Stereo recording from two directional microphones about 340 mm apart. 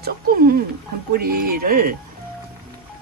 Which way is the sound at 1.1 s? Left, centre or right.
Right.